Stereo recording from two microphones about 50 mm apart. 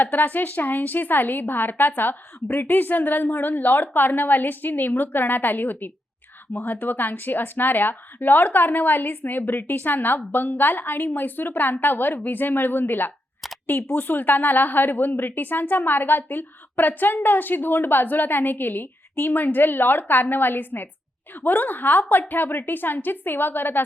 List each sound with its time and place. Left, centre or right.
0.0 s a woman's voice: left